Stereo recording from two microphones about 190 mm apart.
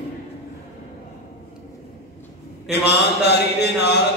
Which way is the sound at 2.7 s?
60° left (ahead or behind).